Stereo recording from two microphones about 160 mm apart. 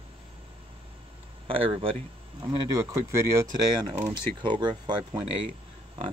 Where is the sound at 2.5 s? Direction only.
20° right (ahead or behind).